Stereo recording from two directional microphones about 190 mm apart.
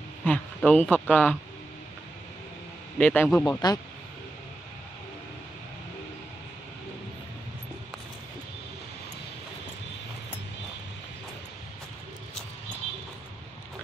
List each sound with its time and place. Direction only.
0.2 s speech: 10° left (ahead or behind)
3.0 s speech: 10° left (ahead or behind)
3.4 s speech: 20° left (ahead or behind)